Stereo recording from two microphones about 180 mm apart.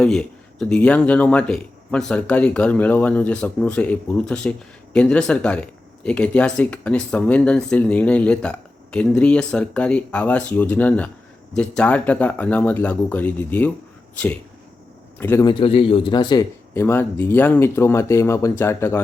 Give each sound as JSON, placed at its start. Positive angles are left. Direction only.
{"t": 0.0, "sound": "speech", "side_deg": 5}
{"t": 15.2, "sound": "speech", "side_deg": 15}
{"t": 15.5, "sound": "speech", "side_deg": 30}